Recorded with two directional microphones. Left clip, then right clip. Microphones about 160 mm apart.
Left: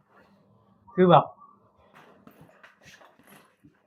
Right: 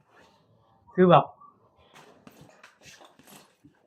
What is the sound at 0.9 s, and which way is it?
Speech, 5° left (ahead or behind).